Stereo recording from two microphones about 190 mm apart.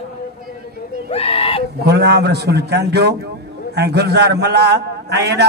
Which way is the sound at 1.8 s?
60° right (ahead or behind).